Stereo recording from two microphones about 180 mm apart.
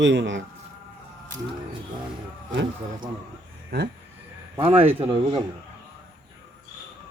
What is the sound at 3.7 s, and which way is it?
Speech, 55° right (ahead or behind).